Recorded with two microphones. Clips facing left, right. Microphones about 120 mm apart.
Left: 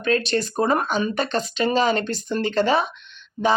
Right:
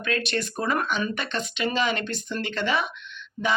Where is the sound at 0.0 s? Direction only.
30° left (ahead or behind).